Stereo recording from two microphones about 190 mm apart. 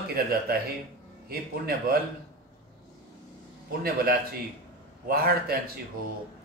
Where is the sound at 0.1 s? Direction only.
55° right (ahead or behind).